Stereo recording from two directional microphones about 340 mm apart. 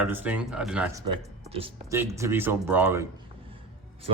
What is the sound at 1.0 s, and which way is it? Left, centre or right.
Speech, centre.